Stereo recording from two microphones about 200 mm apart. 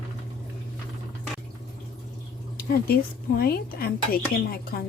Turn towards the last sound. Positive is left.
turn(degrees=50)  # may be behind; listen again after turning